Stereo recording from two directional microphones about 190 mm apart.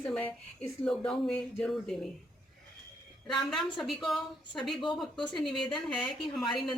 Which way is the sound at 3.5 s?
Centre (ahead or behind).